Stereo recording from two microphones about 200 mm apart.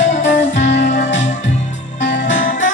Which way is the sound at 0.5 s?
35° left (ahead or behind).